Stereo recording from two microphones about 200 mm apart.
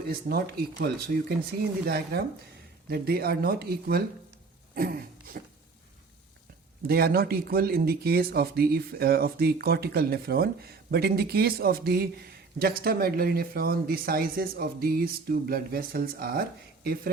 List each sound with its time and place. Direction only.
0.1 s speech: 50° right (ahead or behind)
4.7 s a sound: 45° right (ahead or behind)
6.8 s speech: 50° right (ahead or behind)